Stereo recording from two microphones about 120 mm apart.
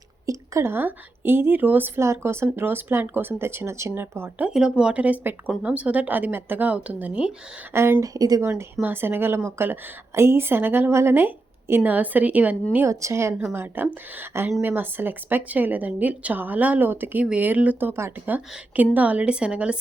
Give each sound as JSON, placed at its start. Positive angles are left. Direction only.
{"t": 0.3, "sound": "a woman's voice", "side_deg": -25}
{"t": 4.4, "sound": "speech", "side_deg": -5}
{"t": 7.7, "sound": "a woman's voice", "side_deg": -20}
{"t": 12.7, "sound": "a woman's voice", "side_deg": -25}